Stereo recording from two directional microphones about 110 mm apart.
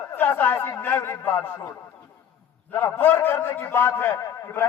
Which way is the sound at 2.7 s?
20° left (ahead or behind).